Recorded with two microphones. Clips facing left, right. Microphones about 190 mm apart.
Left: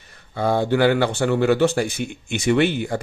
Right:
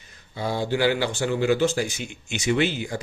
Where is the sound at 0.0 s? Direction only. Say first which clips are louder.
Left 7 dB; 60° left (ahead or behind).